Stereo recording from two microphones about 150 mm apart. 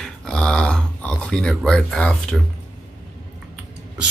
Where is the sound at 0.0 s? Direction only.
5° left (ahead or behind).